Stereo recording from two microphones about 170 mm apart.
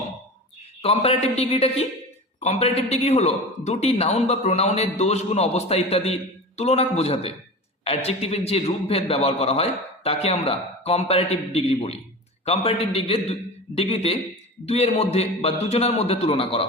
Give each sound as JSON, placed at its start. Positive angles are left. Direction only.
{"t": 0.8, "sound": "a man's voice", "side_deg": 35}